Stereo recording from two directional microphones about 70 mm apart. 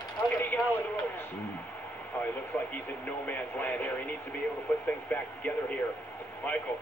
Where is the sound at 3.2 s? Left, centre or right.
Left.